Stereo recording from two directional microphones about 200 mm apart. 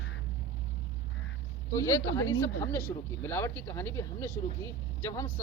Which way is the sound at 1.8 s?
15° left (ahead or behind).